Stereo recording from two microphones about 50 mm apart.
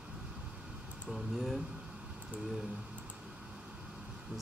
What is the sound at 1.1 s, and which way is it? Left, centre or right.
Speech, centre.